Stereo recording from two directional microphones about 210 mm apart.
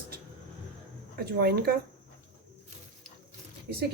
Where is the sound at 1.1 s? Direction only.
50° right (ahead or behind).